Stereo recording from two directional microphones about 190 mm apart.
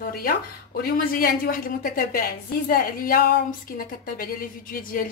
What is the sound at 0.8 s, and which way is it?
A woman's voice, 50° left (ahead or behind).